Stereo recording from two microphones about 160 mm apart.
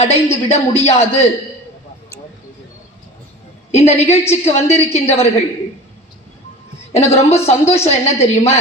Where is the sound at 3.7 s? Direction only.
40° left (ahead or behind).